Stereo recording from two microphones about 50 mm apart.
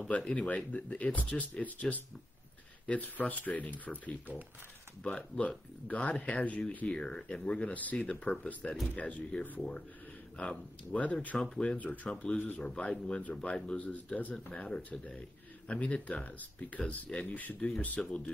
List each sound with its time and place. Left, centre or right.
0.2 s speech: left
5.0 s speech: left
5.9 s speech: left
7.0 s speech: centre
7.7 s speech: left
8.0 s speech: left
9.6 s speech: centre
11.3 s speech: centre
11.6 s speech: left
12.4 s speech: left
12.6 s speech: left
17.3 s speech: left
17.8 s speech: left